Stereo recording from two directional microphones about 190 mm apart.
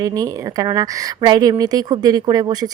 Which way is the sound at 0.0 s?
20° right (ahead or behind).